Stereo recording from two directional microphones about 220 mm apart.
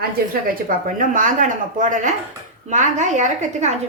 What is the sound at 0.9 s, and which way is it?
A woman's voice, 35° right (ahead or behind).